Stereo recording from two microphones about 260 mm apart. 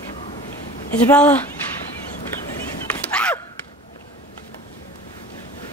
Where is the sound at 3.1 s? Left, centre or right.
Centre.